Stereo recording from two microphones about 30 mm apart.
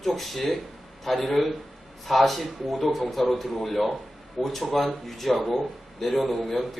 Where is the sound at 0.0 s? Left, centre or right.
Centre.